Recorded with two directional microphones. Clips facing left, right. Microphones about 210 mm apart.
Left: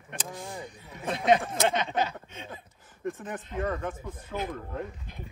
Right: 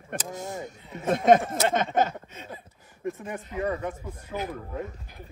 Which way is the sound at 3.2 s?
10° right (ahead or behind).